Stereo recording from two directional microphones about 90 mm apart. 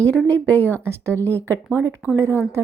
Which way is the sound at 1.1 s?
20° left (ahead or behind).